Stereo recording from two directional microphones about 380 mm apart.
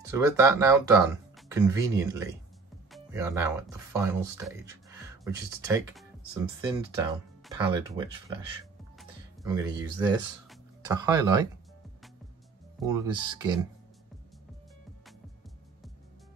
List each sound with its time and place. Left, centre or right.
0.0 s speech: centre
8.9 s music: centre
12.8 s speech: centre